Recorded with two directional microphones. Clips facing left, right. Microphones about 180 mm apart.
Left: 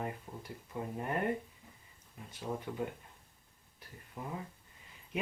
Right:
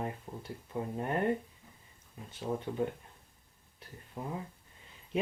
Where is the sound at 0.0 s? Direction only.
25° right (ahead or behind).